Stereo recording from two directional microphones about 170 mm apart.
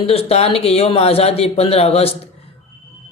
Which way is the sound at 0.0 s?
35° left (ahead or behind).